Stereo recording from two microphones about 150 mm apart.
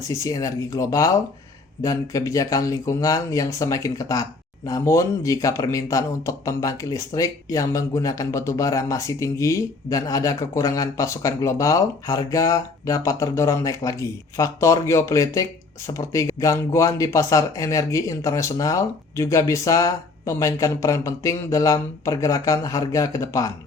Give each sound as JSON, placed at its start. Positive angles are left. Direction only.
{"t": 0.0, "sound": "speech", "side_deg": 20}